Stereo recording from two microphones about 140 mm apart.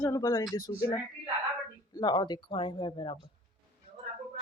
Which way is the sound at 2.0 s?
30° left (ahead or behind).